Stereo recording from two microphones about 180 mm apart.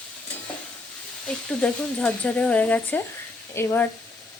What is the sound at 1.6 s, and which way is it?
Speech, 10° left (ahead or behind).